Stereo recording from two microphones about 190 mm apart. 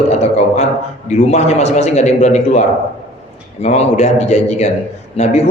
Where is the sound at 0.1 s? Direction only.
35° left (ahead or behind).